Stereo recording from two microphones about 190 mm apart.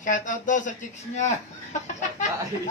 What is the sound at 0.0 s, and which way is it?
A man's voice, 40° left (ahead or behind).